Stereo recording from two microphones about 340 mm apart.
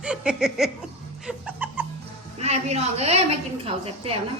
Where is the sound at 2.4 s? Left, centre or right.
Centre.